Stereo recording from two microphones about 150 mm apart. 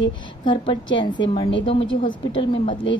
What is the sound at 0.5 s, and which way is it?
A woman's voice, 30° left (ahead or behind).